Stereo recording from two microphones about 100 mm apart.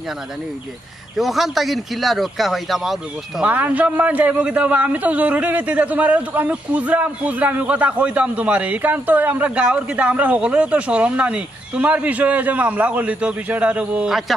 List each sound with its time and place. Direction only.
1.1 s speech: centre (ahead or behind)
3.4 s a man's voice: 15° right (ahead or behind)